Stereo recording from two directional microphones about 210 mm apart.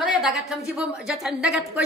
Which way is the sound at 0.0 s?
Centre (ahead or behind).